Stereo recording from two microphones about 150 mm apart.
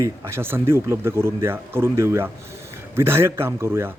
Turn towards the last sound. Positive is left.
turn(degrees=-15)  # may be behind; listen again after turning